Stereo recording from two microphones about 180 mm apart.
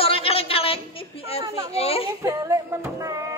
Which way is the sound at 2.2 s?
20° right (ahead or behind).